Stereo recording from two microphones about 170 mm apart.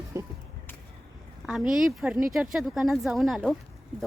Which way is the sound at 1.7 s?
5° right (ahead or behind).